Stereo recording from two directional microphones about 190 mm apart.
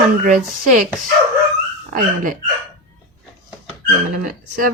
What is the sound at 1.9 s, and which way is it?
Speech, 45° right (ahead or behind).